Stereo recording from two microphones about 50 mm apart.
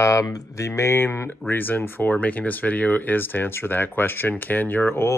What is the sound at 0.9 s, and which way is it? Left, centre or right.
Speech, left.